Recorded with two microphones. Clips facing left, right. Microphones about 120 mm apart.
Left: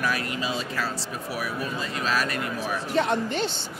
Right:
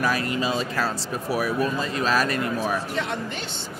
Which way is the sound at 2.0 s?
40° right (ahead or behind).